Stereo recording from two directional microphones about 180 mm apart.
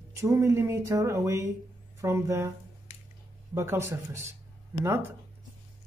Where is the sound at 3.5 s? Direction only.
15° right (ahead or behind).